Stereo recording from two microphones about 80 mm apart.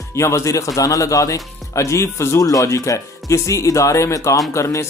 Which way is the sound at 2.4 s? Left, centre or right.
Left.